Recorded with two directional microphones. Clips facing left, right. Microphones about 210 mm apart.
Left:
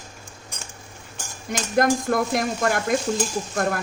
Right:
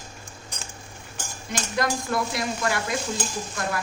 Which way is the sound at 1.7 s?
50° left (ahead or behind).